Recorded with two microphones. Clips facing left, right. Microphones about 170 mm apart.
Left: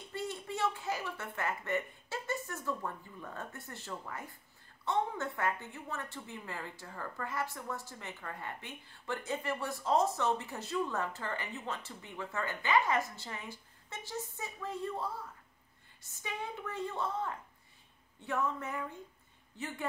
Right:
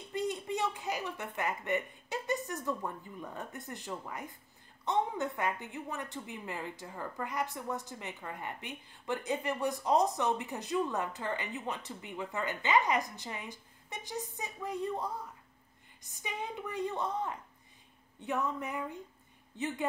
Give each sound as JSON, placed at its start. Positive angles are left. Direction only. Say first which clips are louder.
{"t": 0.1, "sound": "a woman's voice", "louder": "right 5 dB", "side_deg": -15}